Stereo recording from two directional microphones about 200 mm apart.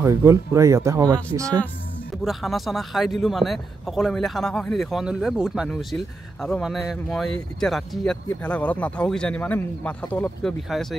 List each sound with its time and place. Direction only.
0.0 s speech: 15° right (ahead or behind)
2.2 s a man's voice: centre (ahead or behind)